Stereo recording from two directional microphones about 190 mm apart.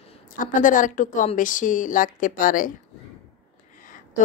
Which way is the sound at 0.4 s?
45° left (ahead or behind).